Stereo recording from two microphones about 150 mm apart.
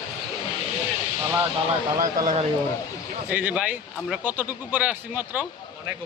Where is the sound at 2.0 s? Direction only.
55° right (ahead or behind).